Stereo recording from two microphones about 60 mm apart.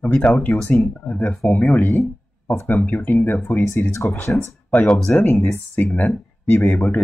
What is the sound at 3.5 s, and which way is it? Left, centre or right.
Speech, left.